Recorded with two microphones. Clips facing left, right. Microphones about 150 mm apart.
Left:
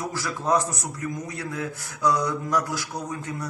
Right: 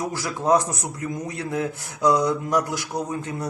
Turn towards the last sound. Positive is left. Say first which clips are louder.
# right 4 dB
turn(degrees=-25)  # may be behind; listen again after turning